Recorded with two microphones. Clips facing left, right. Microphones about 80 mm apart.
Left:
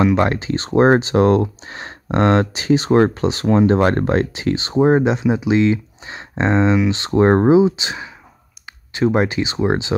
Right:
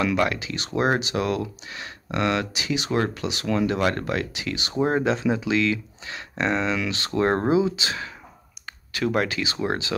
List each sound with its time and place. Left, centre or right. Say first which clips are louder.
0.0 s speech: left 7 dB; left